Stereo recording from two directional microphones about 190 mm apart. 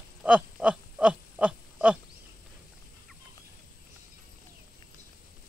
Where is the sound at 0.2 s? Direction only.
5° right (ahead or behind).